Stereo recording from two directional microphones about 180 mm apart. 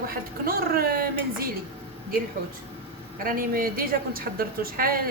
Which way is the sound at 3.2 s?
50° right (ahead or behind).